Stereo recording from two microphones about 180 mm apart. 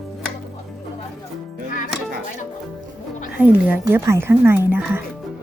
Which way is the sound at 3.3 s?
10° right (ahead or behind).